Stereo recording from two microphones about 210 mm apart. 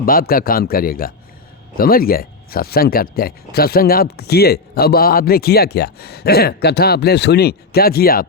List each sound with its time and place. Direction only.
0.0 s speech: 45° left (ahead or behind)